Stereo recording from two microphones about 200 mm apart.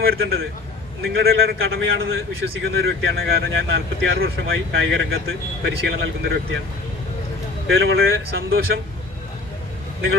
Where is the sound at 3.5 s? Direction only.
80° right.